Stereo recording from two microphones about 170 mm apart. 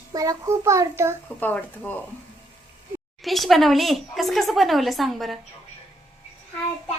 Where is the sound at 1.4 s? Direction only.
10° left (ahead or behind).